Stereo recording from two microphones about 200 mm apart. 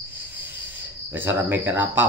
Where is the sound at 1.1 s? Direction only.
10° right (ahead or behind).